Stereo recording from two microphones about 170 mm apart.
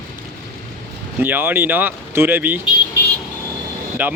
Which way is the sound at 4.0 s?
10° right (ahead or behind).